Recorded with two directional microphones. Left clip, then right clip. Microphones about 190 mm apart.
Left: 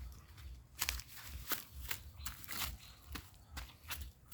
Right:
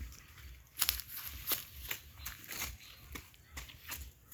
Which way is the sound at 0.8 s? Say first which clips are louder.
Right 4 dB; 25° left (ahead or behind).